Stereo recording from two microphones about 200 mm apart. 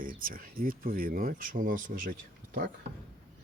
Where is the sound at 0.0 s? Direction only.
45° right (ahead or behind).